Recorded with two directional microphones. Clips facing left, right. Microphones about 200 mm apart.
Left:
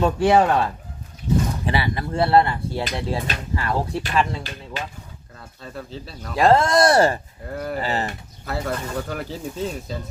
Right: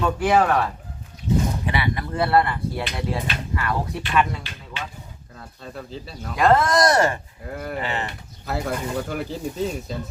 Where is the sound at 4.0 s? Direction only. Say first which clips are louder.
Even; 35° left (ahead or behind).